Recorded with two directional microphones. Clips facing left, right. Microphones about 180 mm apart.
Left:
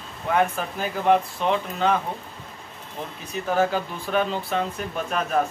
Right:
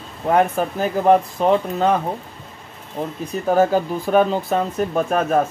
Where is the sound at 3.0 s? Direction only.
40° right (ahead or behind).